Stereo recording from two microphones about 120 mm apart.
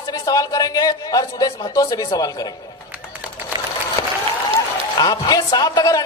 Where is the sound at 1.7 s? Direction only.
30° left (ahead or behind).